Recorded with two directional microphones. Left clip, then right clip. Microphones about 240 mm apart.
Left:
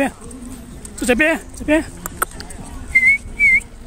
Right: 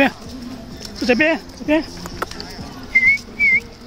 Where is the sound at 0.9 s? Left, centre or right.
Centre.